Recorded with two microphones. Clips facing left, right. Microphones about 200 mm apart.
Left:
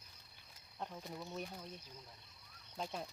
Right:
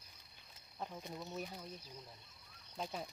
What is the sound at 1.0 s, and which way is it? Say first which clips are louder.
Speech: even; 20° right (ahead or behind).